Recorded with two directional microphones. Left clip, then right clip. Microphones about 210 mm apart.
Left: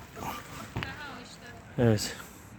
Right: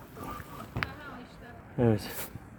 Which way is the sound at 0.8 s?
45° right (ahead or behind).